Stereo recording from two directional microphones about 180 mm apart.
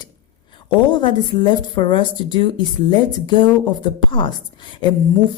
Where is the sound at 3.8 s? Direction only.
25° left (ahead or behind).